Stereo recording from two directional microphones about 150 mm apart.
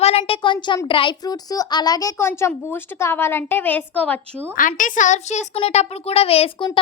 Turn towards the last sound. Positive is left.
turn(degrees=40)  # may be behind; listen again after turning